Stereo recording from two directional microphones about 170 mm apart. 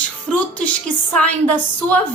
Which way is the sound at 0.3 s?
10° left (ahead or behind).